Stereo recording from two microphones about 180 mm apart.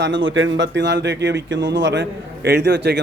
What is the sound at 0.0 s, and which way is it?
A man's voice, 90° right.